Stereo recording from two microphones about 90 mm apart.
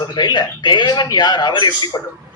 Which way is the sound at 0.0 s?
55° left (ahead or behind).